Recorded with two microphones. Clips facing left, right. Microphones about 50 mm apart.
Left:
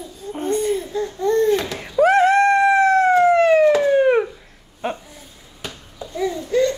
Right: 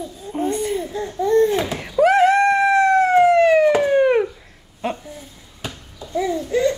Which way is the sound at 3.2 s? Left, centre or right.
Centre.